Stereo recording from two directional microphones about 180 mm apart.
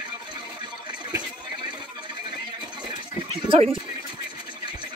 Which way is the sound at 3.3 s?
35° right (ahead or behind).